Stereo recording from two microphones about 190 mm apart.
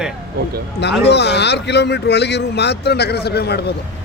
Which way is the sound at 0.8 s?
65° left (ahead or behind).